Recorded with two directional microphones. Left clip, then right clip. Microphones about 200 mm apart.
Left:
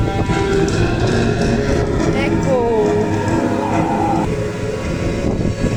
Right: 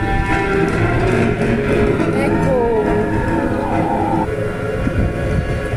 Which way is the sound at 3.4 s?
50° left (ahead or behind).